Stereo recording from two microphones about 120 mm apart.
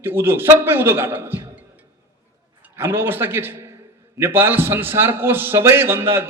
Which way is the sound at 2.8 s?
20° right (ahead or behind).